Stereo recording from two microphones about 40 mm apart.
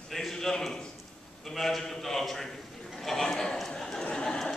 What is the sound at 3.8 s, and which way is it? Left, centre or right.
Chatter, centre.